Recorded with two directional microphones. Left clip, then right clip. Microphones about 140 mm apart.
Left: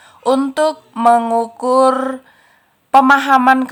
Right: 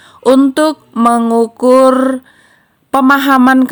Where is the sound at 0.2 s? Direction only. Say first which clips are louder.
Right 5 dB; 25° right (ahead or behind).